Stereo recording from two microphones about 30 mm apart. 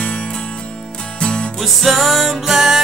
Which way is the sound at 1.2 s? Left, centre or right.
Left.